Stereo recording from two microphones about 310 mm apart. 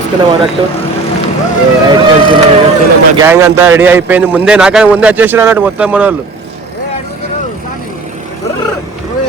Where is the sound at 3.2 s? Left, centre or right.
Centre.